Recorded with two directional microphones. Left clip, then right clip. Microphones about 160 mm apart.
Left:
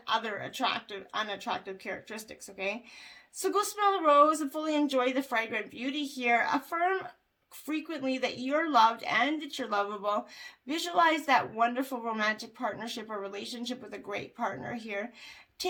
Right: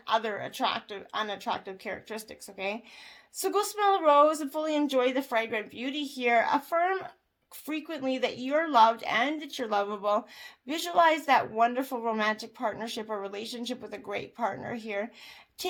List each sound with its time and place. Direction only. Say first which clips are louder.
0.0 s speech: right 3 dB; 35° right (ahead or behind)